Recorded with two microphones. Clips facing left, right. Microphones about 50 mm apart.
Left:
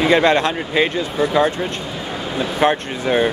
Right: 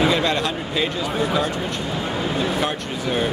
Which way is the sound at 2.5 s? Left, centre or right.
Left.